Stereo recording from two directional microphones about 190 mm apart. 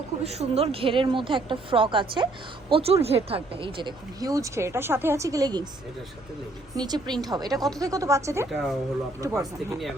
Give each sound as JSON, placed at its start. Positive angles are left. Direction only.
{"t": 0.3, "sound": "speech", "side_deg": -35}
{"t": 6.7, "sound": "speech", "side_deg": -20}
{"t": 8.4, "sound": "speech", "side_deg": 0}
{"t": 9.2, "sound": "speech", "side_deg": -15}